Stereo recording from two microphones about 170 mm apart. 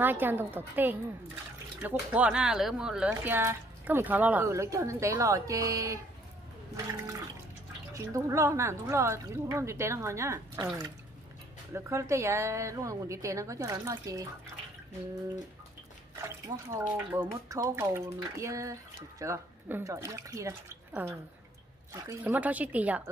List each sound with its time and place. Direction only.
0.0 s speech: 10° right (ahead or behind)
7.9 s speech: 20° right (ahead or behind)
11.7 s speech: 15° right (ahead or behind)
16.4 s speech: 20° right (ahead or behind)
22.2 s speech: 10° right (ahead or behind)